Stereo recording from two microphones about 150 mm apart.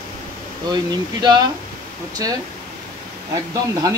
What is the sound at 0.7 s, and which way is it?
Speech, 30° right (ahead or behind).